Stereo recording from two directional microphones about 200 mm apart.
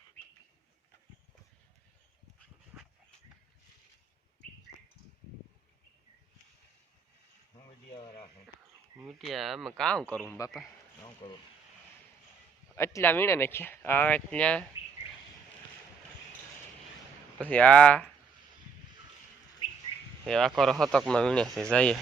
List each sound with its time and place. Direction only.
2.7 s dog: 5° right (ahead or behind)
9.0 s speech: centre (ahead or behind)
11.0 s speech: 20° left (ahead or behind)
12.7 s speech: 15° left (ahead or behind)
17.5 s speech: 5° left (ahead or behind)
20.2 s speech: centre (ahead or behind)